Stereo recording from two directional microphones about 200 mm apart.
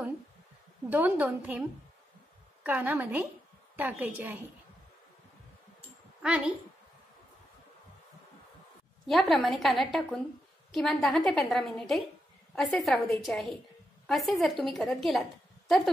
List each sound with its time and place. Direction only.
0.8 s a woman's voice: 10° right (ahead or behind)
2.6 s a woman's voice: 10° right (ahead or behind)
5.8 s a sound: 5° right (ahead or behind)
9.0 s a woman's voice: centre (ahead or behind)